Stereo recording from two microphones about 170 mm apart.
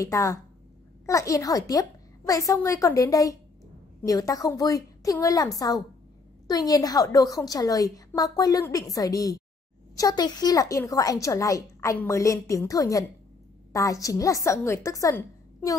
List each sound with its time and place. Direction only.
0.0 s speech: 20° left (ahead or behind)